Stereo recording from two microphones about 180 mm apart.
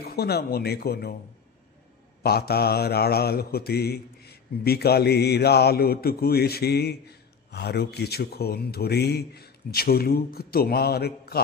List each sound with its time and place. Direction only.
0.0 s mantra: 60° left (ahead or behind)
2.2 s mantra: 60° left (ahead or behind)